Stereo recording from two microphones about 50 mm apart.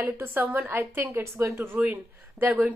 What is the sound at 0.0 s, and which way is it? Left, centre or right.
A woman's voice, right.